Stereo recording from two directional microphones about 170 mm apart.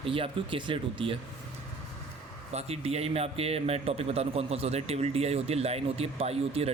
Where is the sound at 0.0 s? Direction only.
30° right (ahead or behind).